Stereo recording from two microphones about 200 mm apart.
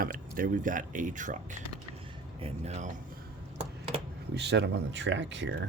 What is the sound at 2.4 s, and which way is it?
Speech, 35° right (ahead or behind).